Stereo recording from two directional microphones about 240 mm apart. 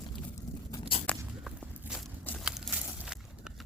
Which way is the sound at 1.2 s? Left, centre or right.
Centre.